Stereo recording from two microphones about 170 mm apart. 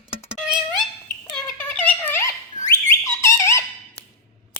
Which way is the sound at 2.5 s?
25° left (ahead or behind).